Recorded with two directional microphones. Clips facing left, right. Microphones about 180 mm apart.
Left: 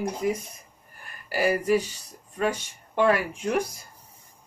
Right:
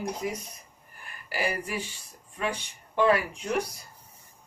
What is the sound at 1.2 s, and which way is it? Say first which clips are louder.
Speech: left 8 dB; 40° left (ahead or behind).